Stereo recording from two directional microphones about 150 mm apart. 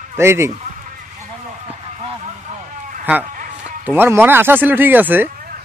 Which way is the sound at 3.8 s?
15° right (ahead or behind).